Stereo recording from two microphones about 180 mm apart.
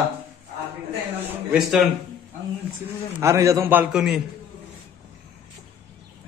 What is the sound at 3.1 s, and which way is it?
Speech, 15° right (ahead or behind).